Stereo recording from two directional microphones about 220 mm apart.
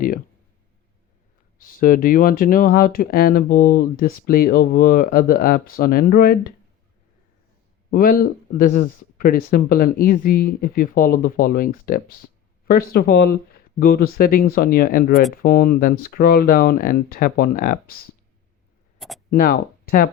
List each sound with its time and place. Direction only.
1.5 s speech: 40° left (ahead or behind)
7.9 s speech: 40° left (ahead or behind)
18.9 s a sound: centre (ahead or behind)
19.3 s speech: 45° left (ahead or behind)